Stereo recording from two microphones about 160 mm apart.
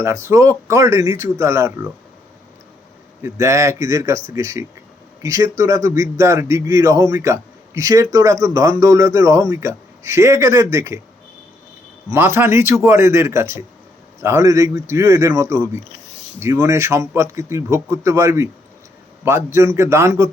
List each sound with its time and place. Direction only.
0.0 s speech: 15° right (ahead or behind)
3.2 s a man's voice: 15° right (ahead or behind)
12.1 s speech: 15° right (ahead or behind)